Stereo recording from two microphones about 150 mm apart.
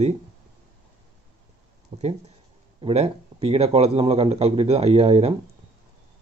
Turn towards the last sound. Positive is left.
turn(degrees=-40)  # may be behind; listen again after turning